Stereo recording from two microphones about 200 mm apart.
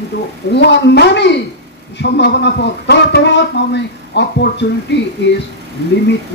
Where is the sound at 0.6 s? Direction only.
60° left (ahead or behind).